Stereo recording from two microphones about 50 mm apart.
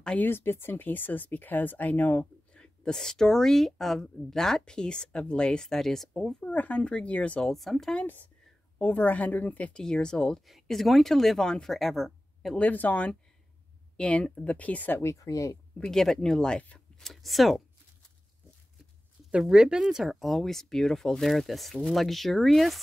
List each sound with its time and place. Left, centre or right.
0.2 s speech: left
2.5 s speech: centre
6.4 s speech: left
7.4 s speech: centre
8.8 s speech: left
9.8 s speech: centre
10.4 s speech: centre
12.5 s speech: left
13.9 s speech: left
15.0 s speech: left
15.8 s speech: centre
17.0 s speech: centre
19.5 s speech: centre